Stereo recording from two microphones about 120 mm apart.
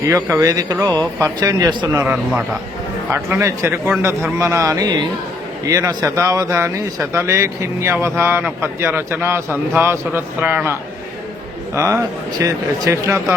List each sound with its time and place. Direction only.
0.0 s a man's voice: 25° right (ahead or behind)
2.1 s a man's voice: 5° right (ahead or behind)
3.1 s a man's voice: 20° right (ahead or behind)
6.1 s a man's voice: 20° right (ahead or behind)